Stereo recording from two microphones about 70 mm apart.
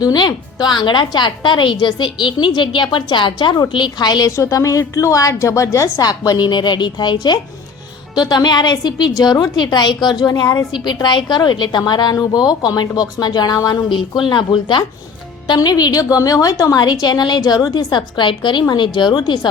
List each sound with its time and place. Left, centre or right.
0.0 s a woman's voice: left
3.1 s a woman's voice: left
4.3 s a woman's voice: left
14.3 s a woman's voice: left
15.4 s a woman's voice: left
16.8 s speech: left
18.7 s a woman's voice: left